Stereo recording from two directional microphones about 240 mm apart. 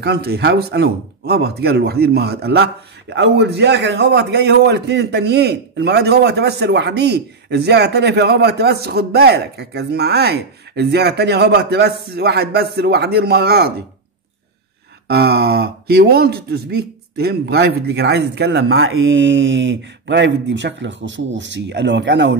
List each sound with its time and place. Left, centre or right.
0.0 s a man's voice: right
15.0 s speech: right
18.7 s a man's voice: right